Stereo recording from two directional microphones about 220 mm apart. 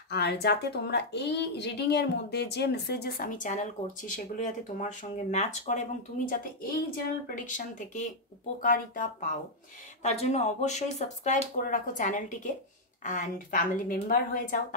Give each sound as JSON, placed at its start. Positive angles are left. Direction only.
{"t": 0.1, "sound": "a woman's voice", "side_deg": 50}